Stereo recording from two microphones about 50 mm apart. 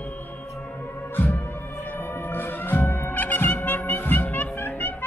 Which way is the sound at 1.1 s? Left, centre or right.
Left.